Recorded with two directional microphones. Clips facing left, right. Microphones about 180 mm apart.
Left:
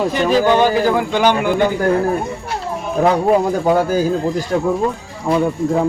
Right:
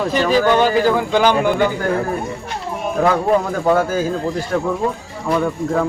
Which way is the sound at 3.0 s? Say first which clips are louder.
Left 2 dB; 15° left (ahead or behind).